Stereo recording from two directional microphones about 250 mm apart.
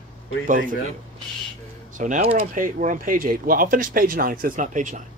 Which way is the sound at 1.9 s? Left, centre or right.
Right.